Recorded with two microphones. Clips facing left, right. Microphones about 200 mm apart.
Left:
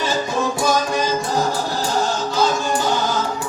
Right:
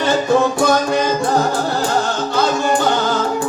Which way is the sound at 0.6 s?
60° right (ahead or behind).